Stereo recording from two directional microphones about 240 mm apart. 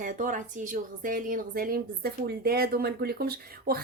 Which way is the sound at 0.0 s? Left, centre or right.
Right.